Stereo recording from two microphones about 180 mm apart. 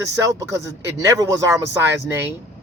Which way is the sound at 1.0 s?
15° right (ahead or behind).